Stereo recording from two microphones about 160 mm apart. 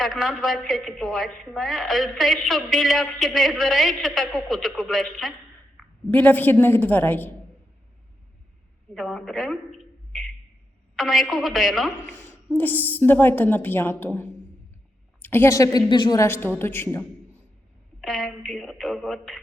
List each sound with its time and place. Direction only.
0.0 s a woman's voice: centre (ahead or behind)
6.1 s a woman's voice: 10° left (ahead or behind)
9.0 s a woman's voice: centre (ahead or behind)
10.1 s a sound: centre (ahead or behind)
10.9 s a woman's voice: centre (ahead or behind)
12.5 s a woman's voice: 10° left (ahead or behind); by 16.2 s 25° left (ahead or behind)
16.2 s a woman's voice: 15° left (ahead or behind)
18.0 s a woman's voice: centre (ahead or behind)